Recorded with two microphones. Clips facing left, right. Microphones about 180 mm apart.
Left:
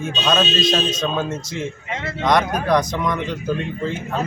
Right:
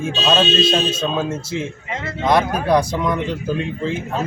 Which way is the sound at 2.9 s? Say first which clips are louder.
Right 2 dB; 5° right (ahead or behind).